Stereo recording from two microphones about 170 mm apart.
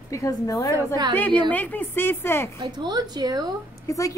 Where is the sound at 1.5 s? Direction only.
10° left (ahead or behind).